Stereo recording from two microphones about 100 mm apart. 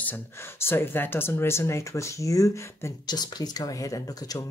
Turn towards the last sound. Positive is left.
turn(degrees=35)  # may be behind; listen again after turning